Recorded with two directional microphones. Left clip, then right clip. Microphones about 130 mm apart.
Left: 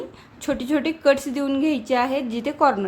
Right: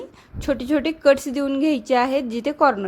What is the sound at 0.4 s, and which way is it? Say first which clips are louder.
A woman's voice: right 2 dB; 40° right (ahead or behind).